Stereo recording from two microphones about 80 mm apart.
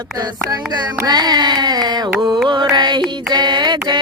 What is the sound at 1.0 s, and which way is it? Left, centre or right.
Mantra, right.